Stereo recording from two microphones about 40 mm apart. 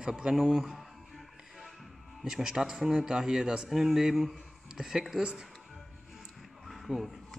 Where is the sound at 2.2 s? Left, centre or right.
Centre.